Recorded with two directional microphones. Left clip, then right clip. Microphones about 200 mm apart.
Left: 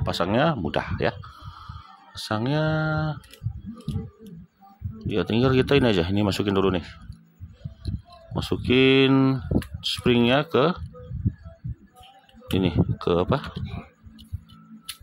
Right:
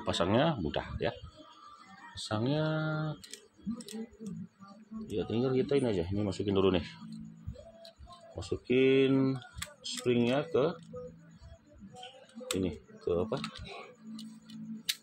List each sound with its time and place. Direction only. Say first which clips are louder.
0.0 s speech: left 6 dB; 20° left (ahead or behind)
2.1 s speech: left 7 dB; 35° left (ahead or behind)
3.7 s a sound: left 5 dB; 10° right (ahead or behind)
5.1 s speech: left 9 dB; 40° left (ahead or behind); by 7.0 s 25° left (ahead or behind)
8.4 s speech: left 8 dB; 45° left (ahead or behind)
12.5 s speech: left 14 dB; 45° left (ahead or behind)